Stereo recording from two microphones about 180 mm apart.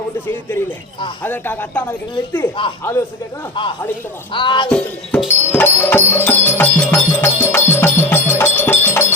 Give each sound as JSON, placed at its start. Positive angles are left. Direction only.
{"t": 1.2, "sound": "speech", "side_deg": 10}
{"t": 2.6, "sound": "speech", "side_deg": 25}
{"t": 4.7, "sound": "music", "side_deg": 5}